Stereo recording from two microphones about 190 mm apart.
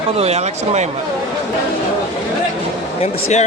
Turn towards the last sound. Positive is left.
turn(degrees=35)  # may be behind; listen again after turning